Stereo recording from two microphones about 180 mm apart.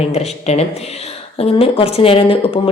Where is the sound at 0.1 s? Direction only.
35° left (ahead or behind).